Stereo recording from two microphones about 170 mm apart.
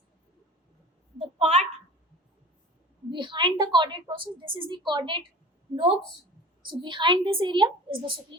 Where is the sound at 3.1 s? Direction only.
25° right (ahead or behind).